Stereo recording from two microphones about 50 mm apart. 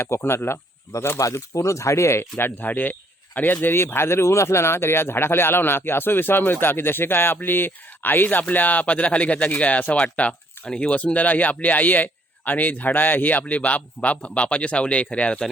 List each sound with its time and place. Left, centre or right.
0.0 s speech: left
1.2 s speech: left
2.4 s speech: left